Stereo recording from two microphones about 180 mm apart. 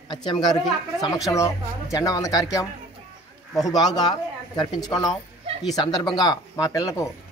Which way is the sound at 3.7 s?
20° left (ahead or behind).